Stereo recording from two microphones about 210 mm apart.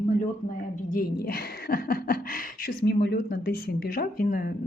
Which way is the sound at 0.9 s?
45° left (ahead or behind).